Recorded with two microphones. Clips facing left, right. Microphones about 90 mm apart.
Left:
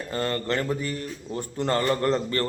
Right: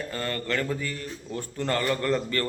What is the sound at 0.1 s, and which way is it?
A man's voice, 30° left (ahead or behind).